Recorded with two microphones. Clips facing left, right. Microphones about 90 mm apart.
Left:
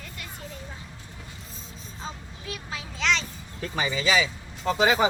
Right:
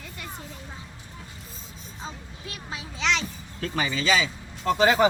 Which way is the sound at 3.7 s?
15° left (ahead or behind).